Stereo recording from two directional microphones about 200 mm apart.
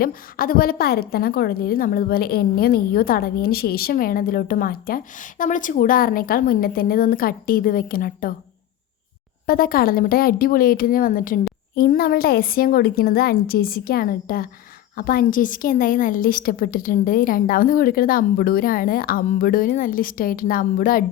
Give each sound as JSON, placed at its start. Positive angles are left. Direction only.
{"t": 0.0, "sound": "a woman's voice", "side_deg": 45}
{"t": 9.5, "sound": "a woman's voice", "side_deg": 45}